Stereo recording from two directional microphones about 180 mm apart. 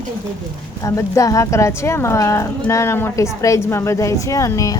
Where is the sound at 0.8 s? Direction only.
15° left (ahead or behind).